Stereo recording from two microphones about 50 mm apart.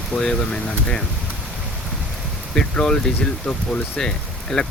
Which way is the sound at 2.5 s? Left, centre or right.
Centre.